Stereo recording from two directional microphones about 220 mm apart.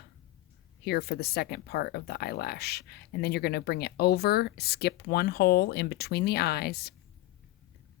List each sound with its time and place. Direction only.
0.9 s speech: 45° left (ahead or behind)